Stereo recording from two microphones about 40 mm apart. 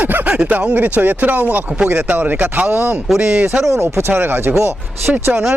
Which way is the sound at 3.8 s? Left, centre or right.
Right.